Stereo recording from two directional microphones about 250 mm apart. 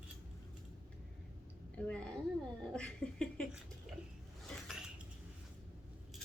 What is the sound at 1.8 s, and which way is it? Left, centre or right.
Speech, centre.